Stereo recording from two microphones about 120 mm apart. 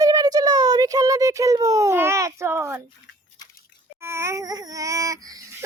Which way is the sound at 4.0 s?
20° right (ahead or behind).